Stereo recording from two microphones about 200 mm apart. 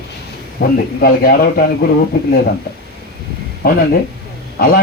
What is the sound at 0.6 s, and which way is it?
Speech, 55° left (ahead or behind).